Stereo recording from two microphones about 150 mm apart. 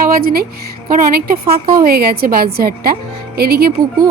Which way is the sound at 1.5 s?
85° right.